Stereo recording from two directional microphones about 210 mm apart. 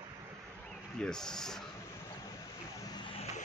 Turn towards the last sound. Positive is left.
turn(degrees=25)  # may be behind; listen again after turning